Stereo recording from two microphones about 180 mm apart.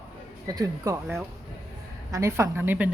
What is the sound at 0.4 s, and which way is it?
A woman's voice, 20° right (ahead or behind).